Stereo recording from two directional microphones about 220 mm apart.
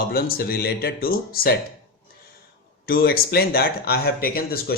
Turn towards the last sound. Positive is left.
turn(degrees=45)  # may be behind; listen again after turning